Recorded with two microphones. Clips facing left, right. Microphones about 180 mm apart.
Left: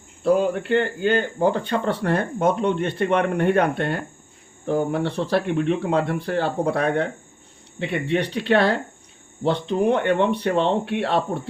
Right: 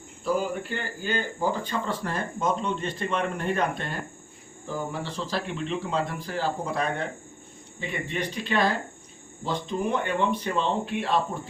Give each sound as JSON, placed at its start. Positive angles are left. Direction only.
{"t": 0.2, "sound": "speech", "side_deg": 65}